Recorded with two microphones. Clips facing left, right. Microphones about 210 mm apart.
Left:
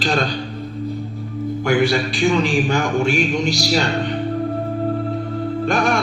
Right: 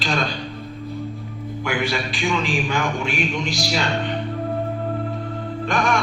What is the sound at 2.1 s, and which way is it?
A man's voice, 40° left (ahead or behind).